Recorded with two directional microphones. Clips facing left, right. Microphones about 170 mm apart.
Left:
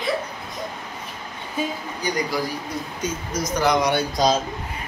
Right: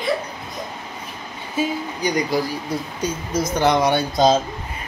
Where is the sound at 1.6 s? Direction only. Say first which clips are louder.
Right 4 dB; 5° right (ahead or behind).